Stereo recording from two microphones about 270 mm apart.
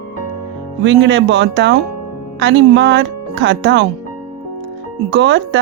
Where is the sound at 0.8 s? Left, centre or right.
Right.